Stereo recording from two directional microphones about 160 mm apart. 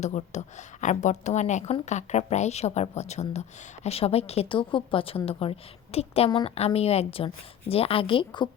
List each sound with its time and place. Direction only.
0.0 s a woman's voice: 45° left (ahead or behind); by 8.4 s 30° left (ahead or behind)